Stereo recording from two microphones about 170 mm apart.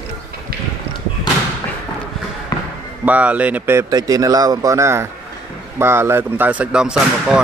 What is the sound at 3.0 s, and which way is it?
Speech, 10° right (ahead or behind).